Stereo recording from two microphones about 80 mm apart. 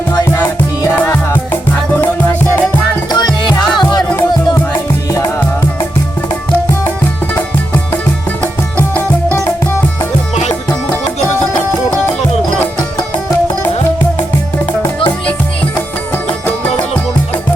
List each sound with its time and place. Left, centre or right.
3.1 s music: left